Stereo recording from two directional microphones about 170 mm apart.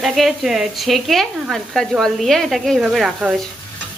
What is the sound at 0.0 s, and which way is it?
Speech, centre (ahead or behind).